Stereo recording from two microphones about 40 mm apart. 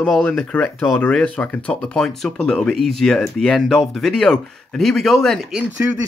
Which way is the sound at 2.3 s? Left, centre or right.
Centre.